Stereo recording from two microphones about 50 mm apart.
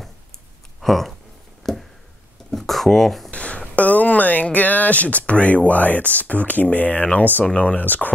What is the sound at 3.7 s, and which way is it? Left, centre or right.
Speech, left.